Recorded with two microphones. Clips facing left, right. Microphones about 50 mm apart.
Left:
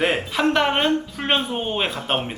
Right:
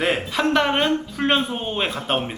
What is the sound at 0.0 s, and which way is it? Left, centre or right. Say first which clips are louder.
A woman's voice: left 1 dB; centre.